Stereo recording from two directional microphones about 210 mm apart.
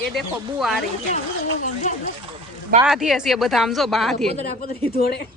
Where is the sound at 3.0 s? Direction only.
Centre (ahead or behind).